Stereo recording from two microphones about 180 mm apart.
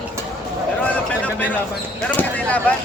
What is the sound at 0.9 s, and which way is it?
Speech, 5° left (ahead or behind).